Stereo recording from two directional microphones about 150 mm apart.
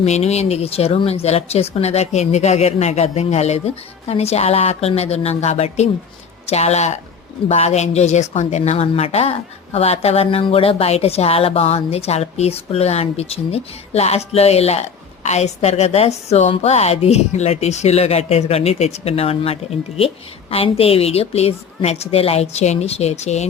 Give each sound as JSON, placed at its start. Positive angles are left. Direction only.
{"t": 0.0, "sound": "a woman's voice", "side_deg": 45}